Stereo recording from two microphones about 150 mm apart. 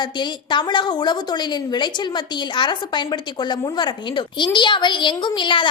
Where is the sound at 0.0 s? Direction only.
30° left (ahead or behind).